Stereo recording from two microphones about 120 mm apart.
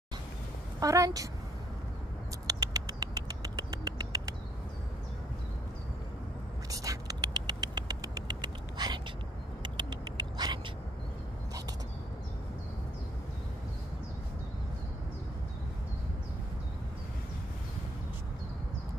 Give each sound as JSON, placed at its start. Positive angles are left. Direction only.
{"t": 0.7, "sound": "a woman's voice", "side_deg": -30}
{"t": 2.4, "sound": "rodents", "side_deg": -30}
{"t": 6.7, "sound": "a sound", "side_deg": -30}